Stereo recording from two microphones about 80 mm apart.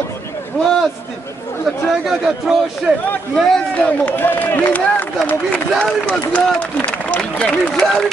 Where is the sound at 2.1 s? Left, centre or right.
Centre.